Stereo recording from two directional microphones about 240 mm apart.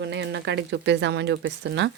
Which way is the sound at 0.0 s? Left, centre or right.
Right.